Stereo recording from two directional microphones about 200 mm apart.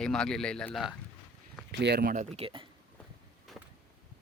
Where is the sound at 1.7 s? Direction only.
55° right (ahead or behind); by 2.5 s 40° right (ahead or behind).